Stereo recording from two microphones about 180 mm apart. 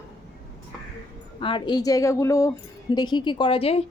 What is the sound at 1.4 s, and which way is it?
A woman's voice, 30° left (ahead or behind).